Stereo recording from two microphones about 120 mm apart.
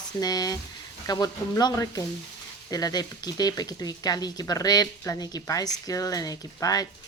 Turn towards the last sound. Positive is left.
turn(degrees=30)  # may be behind; listen again after turning